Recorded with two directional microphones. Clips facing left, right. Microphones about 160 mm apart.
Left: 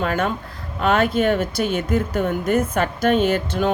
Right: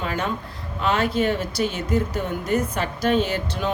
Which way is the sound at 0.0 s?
55° left (ahead or behind).